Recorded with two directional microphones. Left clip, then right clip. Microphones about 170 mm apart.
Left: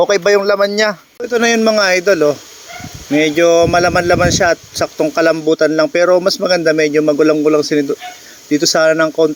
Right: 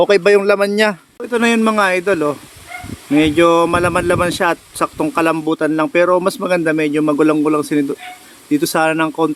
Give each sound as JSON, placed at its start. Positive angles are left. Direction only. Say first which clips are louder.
{"t": 0.1, "sound": "speech", "louder": "even", "side_deg": -20}
{"t": 1.2, "sound": "speech", "louder": "left 3 dB", "side_deg": 5}